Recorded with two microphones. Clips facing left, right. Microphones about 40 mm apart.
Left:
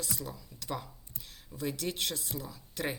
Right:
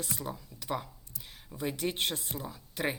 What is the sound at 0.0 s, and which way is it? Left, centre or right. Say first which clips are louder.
Speech: right 2 dB; right.